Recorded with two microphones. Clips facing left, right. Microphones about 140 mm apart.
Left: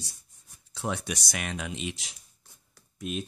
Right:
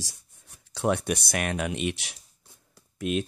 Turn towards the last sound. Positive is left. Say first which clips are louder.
# right 6 dB
turn(degrees=-85)